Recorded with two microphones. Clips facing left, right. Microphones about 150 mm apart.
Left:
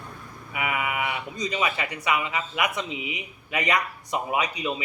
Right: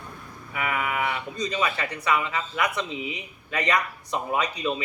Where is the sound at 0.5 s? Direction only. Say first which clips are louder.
Right 1 dB; 15° left (ahead or behind).